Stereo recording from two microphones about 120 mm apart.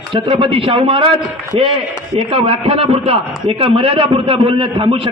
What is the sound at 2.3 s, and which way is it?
A man's voice, 50° right (ahead or behind).